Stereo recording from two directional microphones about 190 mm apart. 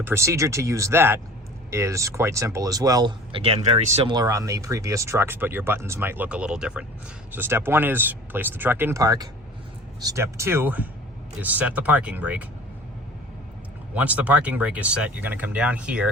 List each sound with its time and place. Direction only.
0.0 s speech: 15° right (ahead or behind)
13.9 s speech: 10° right (ahead or behind)